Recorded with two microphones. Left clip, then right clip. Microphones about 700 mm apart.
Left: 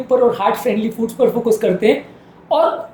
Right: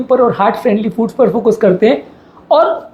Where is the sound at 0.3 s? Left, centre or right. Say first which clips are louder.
Right 4 dB; right.